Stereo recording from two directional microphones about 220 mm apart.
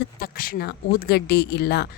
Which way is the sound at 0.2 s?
40° left (ahead or behind).